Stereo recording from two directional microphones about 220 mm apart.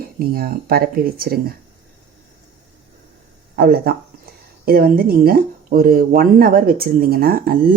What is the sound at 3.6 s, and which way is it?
Speech, 45° right (ahead or behind).